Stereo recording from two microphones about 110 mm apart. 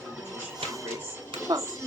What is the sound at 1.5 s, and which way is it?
Speech, 40° right (ahead or behind).